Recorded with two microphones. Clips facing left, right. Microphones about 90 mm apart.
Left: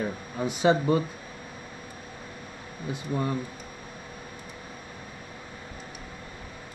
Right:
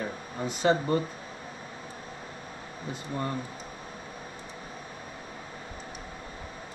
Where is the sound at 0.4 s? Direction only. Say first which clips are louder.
Left 2 dB; 10° left (ahead or behind).